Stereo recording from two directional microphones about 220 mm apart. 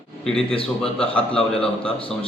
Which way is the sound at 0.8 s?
5° left (ahead or behind).